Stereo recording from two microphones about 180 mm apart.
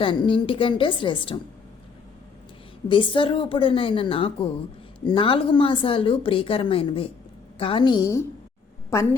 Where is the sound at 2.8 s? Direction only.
25° left (ahead or behind).